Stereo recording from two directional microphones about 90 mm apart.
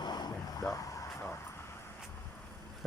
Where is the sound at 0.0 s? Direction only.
50° left (ahead or behind).